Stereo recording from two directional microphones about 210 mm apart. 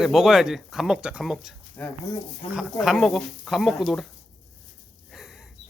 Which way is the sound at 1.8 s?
10° left (ahead or behind).